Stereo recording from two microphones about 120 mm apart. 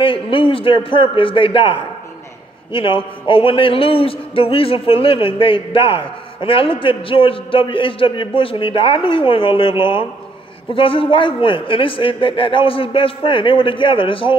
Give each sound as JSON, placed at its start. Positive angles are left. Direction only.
{"t": 0.0, "sound": "a man's voice", "side_deg": 45}